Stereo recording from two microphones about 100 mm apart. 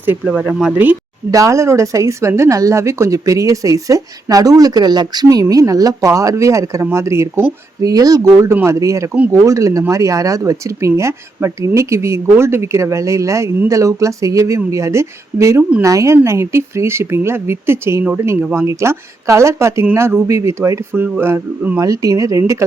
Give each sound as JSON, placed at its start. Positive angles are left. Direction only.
{"t": 0.0, "sound": "speech", "side_deg": -15}
{"t": 1.3, "sound": "speech", "side_deg": -35}
{"t": 21.8, "sound": "speech", "side_deg": -35}